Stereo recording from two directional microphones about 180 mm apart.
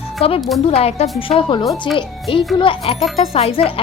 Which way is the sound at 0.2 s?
30° left (ahead or behind).